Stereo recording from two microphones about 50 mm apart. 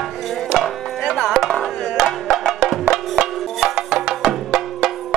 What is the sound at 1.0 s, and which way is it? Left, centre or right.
Music, centre.